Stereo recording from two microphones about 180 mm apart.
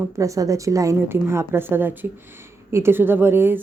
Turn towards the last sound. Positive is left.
turn(degrees=-10)  # may be behind; listen again after turning